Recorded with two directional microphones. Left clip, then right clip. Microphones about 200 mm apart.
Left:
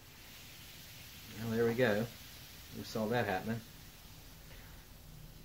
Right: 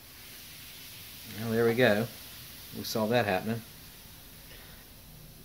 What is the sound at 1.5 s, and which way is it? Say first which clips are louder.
Speech: right 7 dB; 45° right (ahead or behind).